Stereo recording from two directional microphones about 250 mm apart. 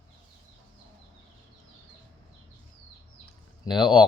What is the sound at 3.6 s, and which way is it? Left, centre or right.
Speech, centre.